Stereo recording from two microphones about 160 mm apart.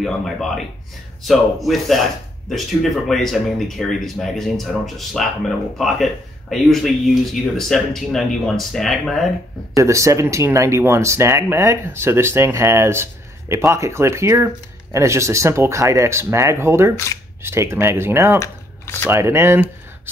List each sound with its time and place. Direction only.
0.0 s speech: centre (ahead or behind)
9.8 s speech: 20° right (ahead or behind)